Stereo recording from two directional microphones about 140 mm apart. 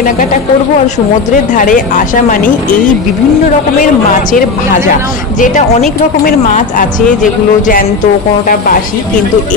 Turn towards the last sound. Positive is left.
turn(degrees=75)  # may be behind; listen again after turning